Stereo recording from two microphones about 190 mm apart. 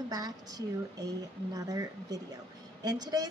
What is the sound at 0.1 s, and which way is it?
A woman's voice, 20° right (ahead or behind).